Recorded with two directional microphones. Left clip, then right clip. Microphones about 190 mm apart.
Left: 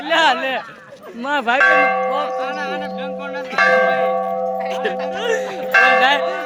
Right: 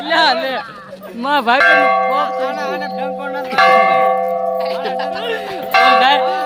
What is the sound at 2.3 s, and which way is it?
Speech, 35° right (ahead or behind).